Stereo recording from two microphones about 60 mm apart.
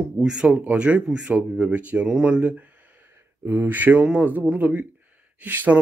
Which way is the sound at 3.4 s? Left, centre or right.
Right.